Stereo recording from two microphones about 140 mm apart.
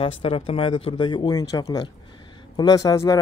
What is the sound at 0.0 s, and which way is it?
Speech, 40° left (ahead or behind).